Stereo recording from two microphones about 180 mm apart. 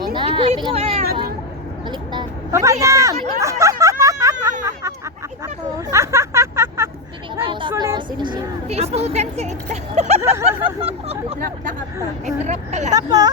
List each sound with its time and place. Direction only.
0.1 s a sound: 25° right (ahead or behind)
1.9 s vehicle: 20° right (ahead or behind)
2.8 s speech: 15° right (ahead or behind)
3.4 s a sound: 15° right (ahead or behind)
5.7 s hubbub: 15° right (ahead or behind)
7.4 s a sound: 25° right (ahead or behind)
7.8 s speech: 25° right (ahead or behind); by 10.2 s 40° right (ahead or behind)
10.2 s speech: 15° right (ahead or behind)
10.8 s speech: 35° right (ahead or behind)
11.3 s speech: 55° right (ahead or behind)
12.2 s speech: 40° right (ahead or behind)
12.9 s speech: 20° right (ahead or behind)